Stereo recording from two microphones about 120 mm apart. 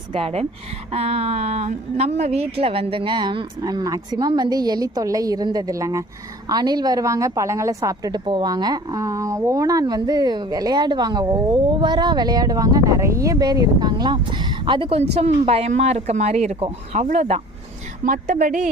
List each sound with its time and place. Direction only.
0.1 s a woman's voice: 55° right (ahead or behind)
0.9 s a woman's voice: 65° right (ahead or behind)
18.1 s a woman's voice: 90° right